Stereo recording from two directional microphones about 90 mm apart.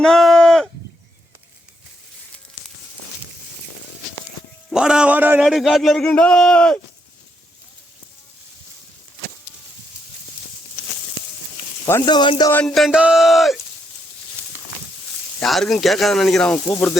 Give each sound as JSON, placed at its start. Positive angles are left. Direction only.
{"t": 0.0, "sound": "a sound", "side_deg": 5}
{"t": 4.7, "sound": "a man's voice", "side_deg": -10}
{"t": 5.4, "sound": "speech", "side_deg": 0}
{"t": 12.0, "sound": "speech", "side_deg": 55}
{"t": 12.6, "sound": "speech", "side_deg": 0}
{"t": 15.4, "sound": "speech", "side_deg": 5}